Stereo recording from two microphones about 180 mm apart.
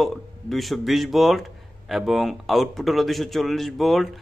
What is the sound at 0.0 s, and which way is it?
A man's voice, centre (ahead or behind).